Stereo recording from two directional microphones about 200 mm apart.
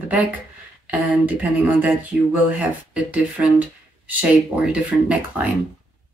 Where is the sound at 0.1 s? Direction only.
5° right (ahead or behind).